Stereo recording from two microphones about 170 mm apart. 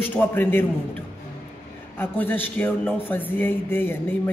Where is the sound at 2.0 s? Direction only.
10° left (ahead or behind).